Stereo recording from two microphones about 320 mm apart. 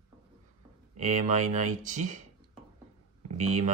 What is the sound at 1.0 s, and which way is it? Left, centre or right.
Speech, right.